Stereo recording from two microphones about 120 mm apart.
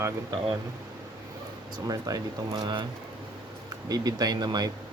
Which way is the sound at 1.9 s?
30° right (ahead or behind).